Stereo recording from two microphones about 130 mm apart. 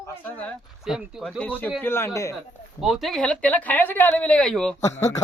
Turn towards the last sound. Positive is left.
turn(degrees=20)  # may be behind; listen again after turning